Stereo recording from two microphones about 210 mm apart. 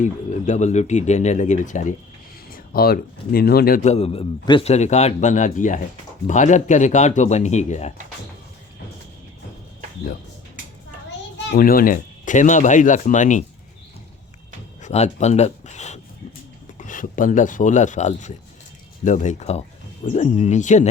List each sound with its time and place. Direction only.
0.0 s a man's voice: 35° left (ahead or behind)
11.5 s a man's voice: 45° left (ahead or behind)
14.8 s a man's voice: 35° left (ahead or behind)